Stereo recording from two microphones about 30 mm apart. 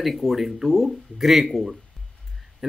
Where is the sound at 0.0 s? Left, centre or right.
Centre.